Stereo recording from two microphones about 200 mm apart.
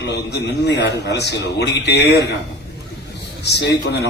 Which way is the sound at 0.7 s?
60° left (ahead or behind).